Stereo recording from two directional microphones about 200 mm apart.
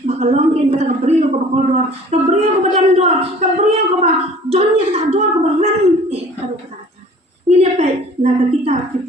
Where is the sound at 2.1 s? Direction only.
35° right (ahead or behind).